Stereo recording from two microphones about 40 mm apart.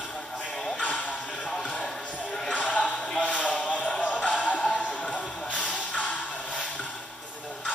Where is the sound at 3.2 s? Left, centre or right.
Left.